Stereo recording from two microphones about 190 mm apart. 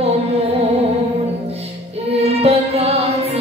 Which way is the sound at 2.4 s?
35° right (ahead or behind).